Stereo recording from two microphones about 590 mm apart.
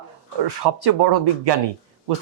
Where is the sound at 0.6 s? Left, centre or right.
Right.